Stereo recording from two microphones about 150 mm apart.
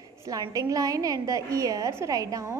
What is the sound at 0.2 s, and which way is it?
A woman's voice, 25° right (ahead or behind).